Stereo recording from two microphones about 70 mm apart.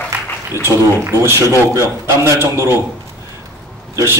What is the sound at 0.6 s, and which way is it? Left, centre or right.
A man's voice, right.